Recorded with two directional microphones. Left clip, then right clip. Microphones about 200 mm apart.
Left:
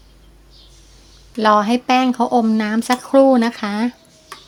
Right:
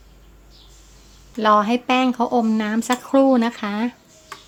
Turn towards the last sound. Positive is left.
turn(degrees=10)  # may be behind; listen again after turning